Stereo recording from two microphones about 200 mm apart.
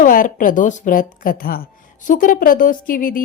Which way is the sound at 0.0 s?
40° left (ahead or behind).